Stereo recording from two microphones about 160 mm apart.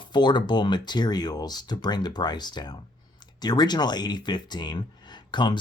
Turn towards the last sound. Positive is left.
turn(degrees=30)  # may be behind; listen again after turning